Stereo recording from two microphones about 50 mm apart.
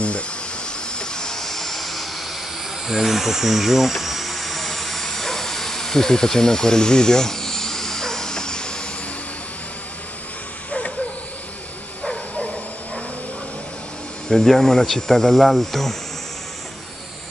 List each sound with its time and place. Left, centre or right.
0.9 s helicopter: centre
2.9 s a sound: centre
12.0 s bow-wow: left
14.3 s speech: centre